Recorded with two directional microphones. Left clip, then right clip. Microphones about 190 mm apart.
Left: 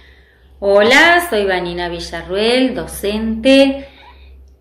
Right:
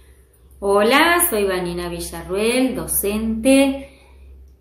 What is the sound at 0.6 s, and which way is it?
Speech, 20° right (ahead or behind).